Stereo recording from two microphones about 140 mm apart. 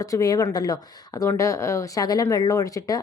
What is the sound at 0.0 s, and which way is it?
Speech, 25° left (ahead or behind).